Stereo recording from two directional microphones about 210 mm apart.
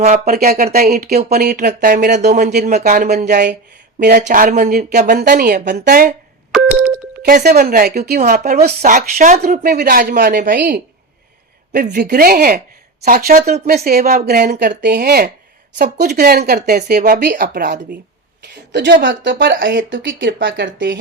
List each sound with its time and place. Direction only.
0.0 s speech: 45° right (ahead or behind)
6.5 s a sound: centre (ahead or behind)
7.2 s speech: 45° right (ahead or behind)
18.7 s speech: 55° right (ahead or behind)
19.5 s speech: 45° right (ahead or behind)